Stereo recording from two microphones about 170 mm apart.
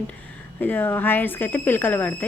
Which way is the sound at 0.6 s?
10° left (ahead or behind).